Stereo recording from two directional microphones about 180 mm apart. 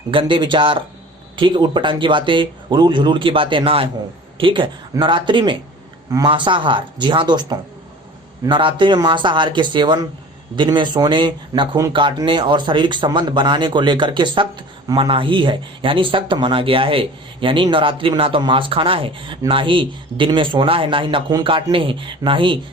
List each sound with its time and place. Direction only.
0.1 s speech: 25° right (ahead or behind)